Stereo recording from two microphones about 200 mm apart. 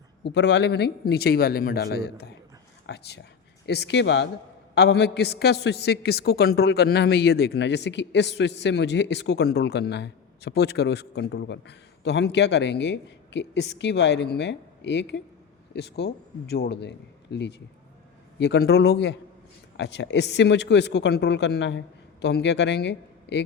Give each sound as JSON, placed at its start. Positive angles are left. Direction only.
{"t": 0.2, "sound": "a man's voice", "side_deg": 60}